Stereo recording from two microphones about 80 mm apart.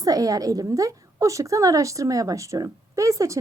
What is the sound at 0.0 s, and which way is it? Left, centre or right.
A woman's voice, right.